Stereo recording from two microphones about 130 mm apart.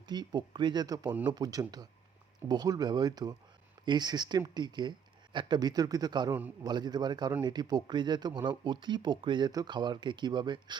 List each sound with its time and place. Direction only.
0.0 s speech: 35° right (ahead or behind)